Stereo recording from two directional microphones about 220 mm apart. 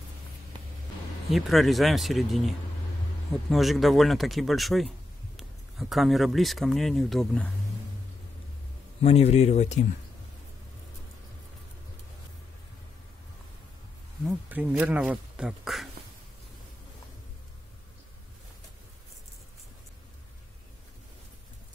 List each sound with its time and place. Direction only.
1.3 s speech: centre (ahead or behind)
9.0 s speech: 30° left (ahead or behind)
14.5 s speech: 5° right (ahead or behind)